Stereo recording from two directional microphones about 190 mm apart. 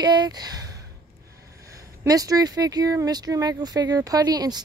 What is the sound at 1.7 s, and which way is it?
Speech, 20° right (ahead or behind).